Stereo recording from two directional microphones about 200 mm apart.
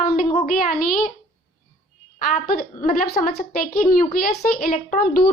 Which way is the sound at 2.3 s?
45° left (ahead or behind).